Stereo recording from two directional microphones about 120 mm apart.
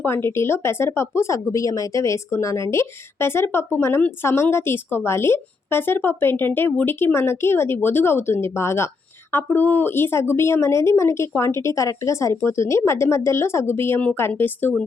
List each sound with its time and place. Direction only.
0.0 s speech: 20° left (ahead or behind)